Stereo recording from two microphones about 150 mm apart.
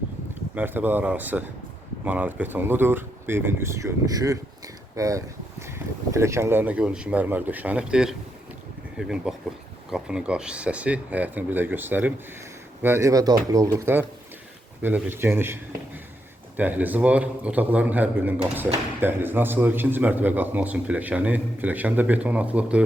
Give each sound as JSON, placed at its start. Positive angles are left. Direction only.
{"t": 0.5, "sound": "a man's voice", "side_deg": -15}
{"t": 16.6, "sound": "a man's voice", "side_deg": -10}